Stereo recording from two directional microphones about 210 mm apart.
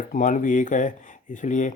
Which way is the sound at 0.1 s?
40° left (ahead or behind).